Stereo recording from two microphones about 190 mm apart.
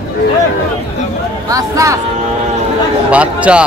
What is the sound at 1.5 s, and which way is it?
Speech, 15° right (ahead or behind).